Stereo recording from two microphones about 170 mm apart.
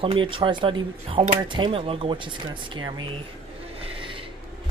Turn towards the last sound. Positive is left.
turn(degrees=-30)  # may be behind; listen again after turning